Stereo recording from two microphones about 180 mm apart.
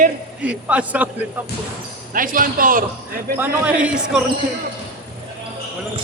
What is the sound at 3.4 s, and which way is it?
Speech, 10° right (ahead or behind).